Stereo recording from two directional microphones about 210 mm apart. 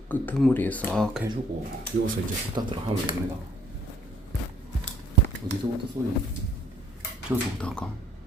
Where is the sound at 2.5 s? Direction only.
20° right (ahead or behind).